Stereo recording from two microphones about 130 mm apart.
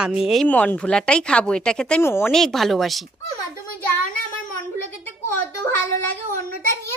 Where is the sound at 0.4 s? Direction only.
10° left (ahead or behind).